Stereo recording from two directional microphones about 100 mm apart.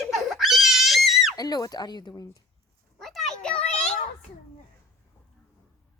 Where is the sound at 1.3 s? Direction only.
40° left (ahead or behind).